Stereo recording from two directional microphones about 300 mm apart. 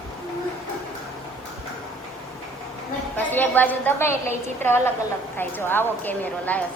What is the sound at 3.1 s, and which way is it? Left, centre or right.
A woman's voice, centre.